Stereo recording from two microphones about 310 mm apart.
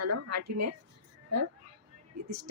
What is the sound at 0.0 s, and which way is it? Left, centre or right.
Speech, right.